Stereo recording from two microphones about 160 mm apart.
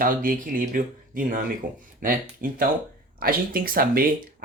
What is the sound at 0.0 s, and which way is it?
Speech, 60° right (ahead or behind).